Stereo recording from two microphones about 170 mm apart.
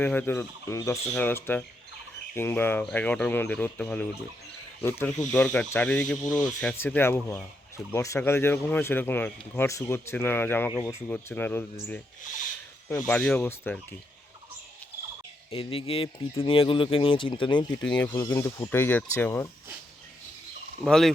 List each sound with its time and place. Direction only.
0.0 s speech: 10° left (ahead or behind)
13.1 s speech: 10° left (ahead or behind)
15.4 s speech: 35° left (ahead or behind)
18.2 s speech: 15° left (ahead or behind)
20.8 s speech: centre (ahead or behind)